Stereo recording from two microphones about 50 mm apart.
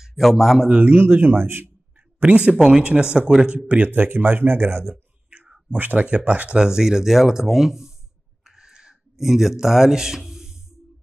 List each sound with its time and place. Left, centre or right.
0.0 s speech: centre
0.7 s speech: right
2.2 s speech: right
3.9 s speech: right
5.3 s whispering: right
5.8 s speech: right
6.0 s speech: right
6.6 s speech: centre
8.5 s a sound: centre